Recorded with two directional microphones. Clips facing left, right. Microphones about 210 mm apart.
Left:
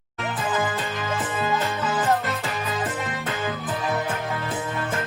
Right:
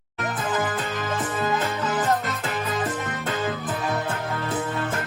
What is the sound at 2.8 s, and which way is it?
Music, 15° left (ahead or behind).